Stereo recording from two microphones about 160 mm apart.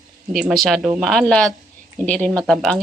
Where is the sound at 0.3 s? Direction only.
Centre (ahead or behind).